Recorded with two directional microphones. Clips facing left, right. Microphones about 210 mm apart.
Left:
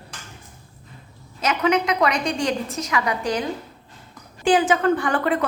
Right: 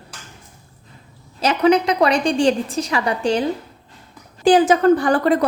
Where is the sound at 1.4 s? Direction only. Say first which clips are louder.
Right 5 dB; 35° right (ahead or behind).